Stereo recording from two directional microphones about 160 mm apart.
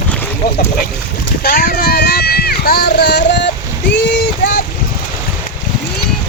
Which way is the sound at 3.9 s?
90° left.